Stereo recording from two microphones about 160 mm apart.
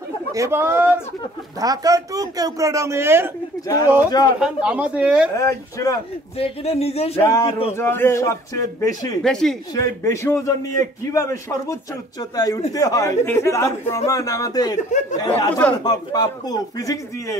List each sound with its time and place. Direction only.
0.3 s speech: 15° right (ahead or behind)
4.4 s speech: 5° right (ahead or behind)
5.4 s a man's voice: 20° left (ahead or behind)
6.3 s speech: 35° left (ahead or behind)
7.2 s a man's voice: 20° left (ahead or behind)
7.4 s speech: 35° left (ahead or behind)
7.7 s a man's voice: 15° left (ahead or behind)
9.2 s speech: 5° left (ahead or behind)
9.8 s a man's voice: 15° left (ahead or behind)
14.8 s speech: 50° left (ahead or behind)
15.1 s a man's voice: 25° left (ahead or behind)